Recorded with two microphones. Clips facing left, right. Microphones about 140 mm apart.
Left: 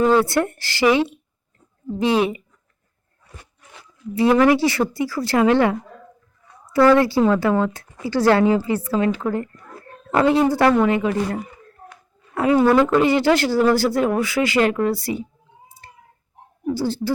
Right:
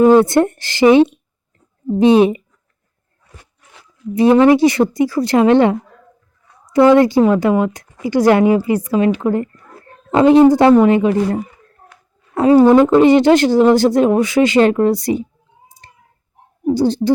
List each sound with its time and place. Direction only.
0.2 s speech: 20° right (ahead or behind)
4.1 s a woman's voice: 20° right (ahead or behind)
16.7 s speech: 20° right (ahead or behind)